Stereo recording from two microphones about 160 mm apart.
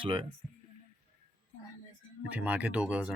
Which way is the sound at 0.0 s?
35° right (ahead or behind).